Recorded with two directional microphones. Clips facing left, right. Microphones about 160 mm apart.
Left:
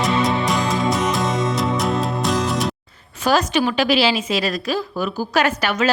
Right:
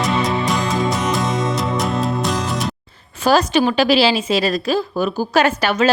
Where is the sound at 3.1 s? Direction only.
30° right (ahead or behind).